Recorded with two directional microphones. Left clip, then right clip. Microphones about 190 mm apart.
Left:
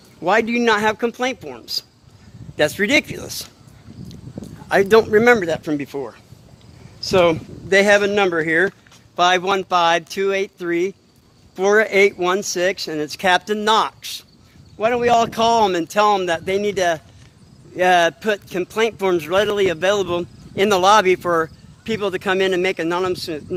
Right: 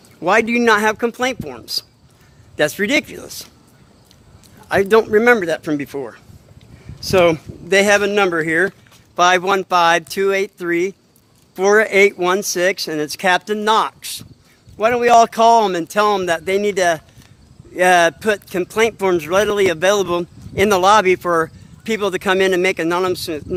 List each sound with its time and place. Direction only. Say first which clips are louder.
0.2 s speech: right 2 dB; 20° right (ahead or behind)
2.6 s speech: even; 10° right (ahead or behind)
3.2 s speech: left 2 dB; 10° left (ahead or behind)
4.7 s speech: even; 5° right (ahead or behind); by 13.2 s 20° right (ahead or behind)
13.2 s speech: right 1 dB; 10° right (ahead or behind)
14.8 s speech: right 4 dB; 30° right (ahead or behind)